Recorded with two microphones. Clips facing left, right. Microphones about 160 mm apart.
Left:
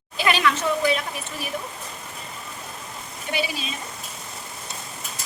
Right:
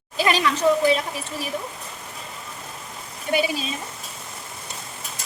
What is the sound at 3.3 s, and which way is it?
Speech, 40° right (ahead or behind).